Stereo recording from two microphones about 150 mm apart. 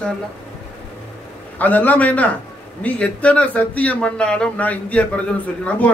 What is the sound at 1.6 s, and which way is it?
Speech, 10° left (ahead or behind).